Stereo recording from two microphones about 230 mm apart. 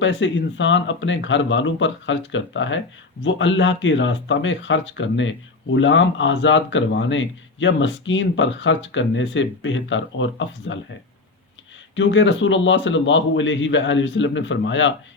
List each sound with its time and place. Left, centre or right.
0.0 s speech: left
11.9 s speech: left